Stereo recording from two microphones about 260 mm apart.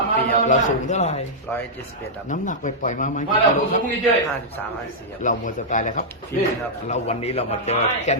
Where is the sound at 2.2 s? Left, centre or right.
Left.